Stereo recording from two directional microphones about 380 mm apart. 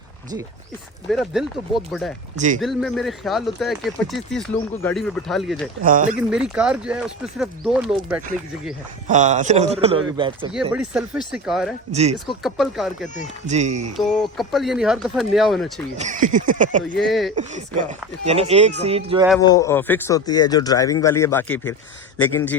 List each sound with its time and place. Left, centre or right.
1.1 s speech: centre
2.3 s speech: centre
2.6 s speech: centre
5.8 s speech: centre
6.5 s speech: centre
9.0 s speech: centre
11.9 s speech: centre
12.4 s speech: centre
13.5 s speech: centre
13.9 s speech: centre
16.0 s speech: centre
17.0 s speech: centre
17.3 s speech: centre
19.3 s speech: centre